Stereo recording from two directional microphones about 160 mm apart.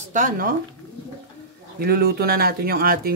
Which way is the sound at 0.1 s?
60° right (ahead or behind).